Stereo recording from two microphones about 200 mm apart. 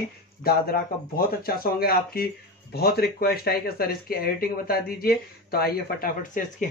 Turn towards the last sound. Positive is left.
turn(degrees=40)  # may be behind; listen again after turning